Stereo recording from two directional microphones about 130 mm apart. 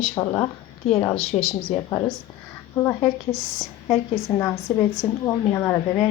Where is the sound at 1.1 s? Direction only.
55° left (ahead or behind).